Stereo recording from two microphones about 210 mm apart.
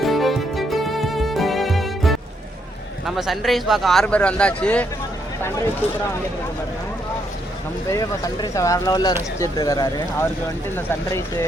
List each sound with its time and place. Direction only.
0.0 s music: centre (ahead or behind)
3.1 s speech: centre (ahead or behind)
7.9 s speech: 15° left (ahead or behind)